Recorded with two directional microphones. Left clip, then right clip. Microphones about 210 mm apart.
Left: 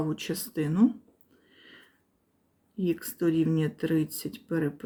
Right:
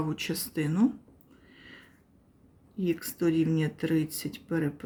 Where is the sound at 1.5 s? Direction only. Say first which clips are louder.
Right 2 dB; 5° left (ahead or behind).